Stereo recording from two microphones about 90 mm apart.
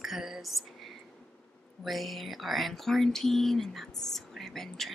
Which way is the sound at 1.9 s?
Centre (ahead or behind).